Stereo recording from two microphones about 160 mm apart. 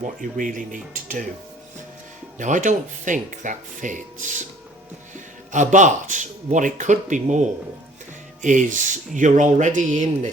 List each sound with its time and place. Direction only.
0.0 s speech: 55° right (ahead or behind)
2.4 s speech: 50° right (ahead or behind)
5.5 s speech: 50° right (ahead or behind)